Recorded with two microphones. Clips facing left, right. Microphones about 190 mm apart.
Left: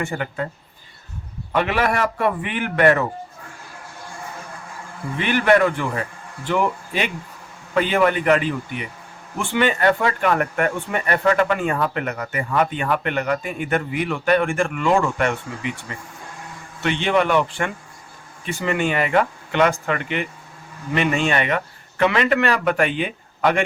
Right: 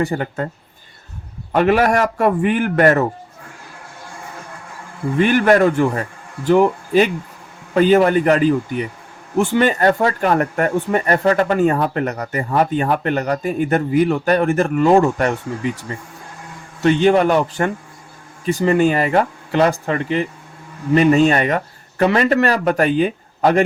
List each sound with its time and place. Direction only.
0.0 s speech: 35° right (ahead or behind)
1.5 s a man's voice: 45° right (ahead or behind)
5.1 s speech: 45° right (ahead or behind)